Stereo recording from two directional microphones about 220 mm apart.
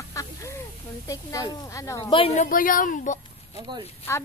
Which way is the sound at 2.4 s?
40° left (ahead or behind).